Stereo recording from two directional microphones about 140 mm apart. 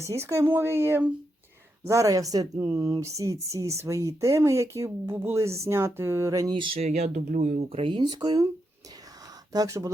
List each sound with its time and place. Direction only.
0.0 s a woman's voice: 20° right (ahead or behind)
6.6 s speech: 50° right (ahead or behind)
7.7 s a woman's voice: 40° right (ahead or behind)
9.5 s a woman's voice: 25° right (ahead or behind)